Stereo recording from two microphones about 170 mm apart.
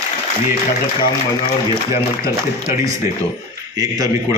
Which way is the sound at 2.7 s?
15° right (ahead or behind).